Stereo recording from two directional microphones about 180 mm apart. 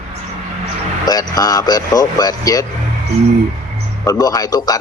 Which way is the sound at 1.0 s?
20° left (ahead or behind).